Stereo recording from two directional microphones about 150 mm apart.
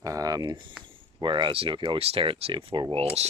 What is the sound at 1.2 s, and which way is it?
Speech, 30° right (ahead or behind).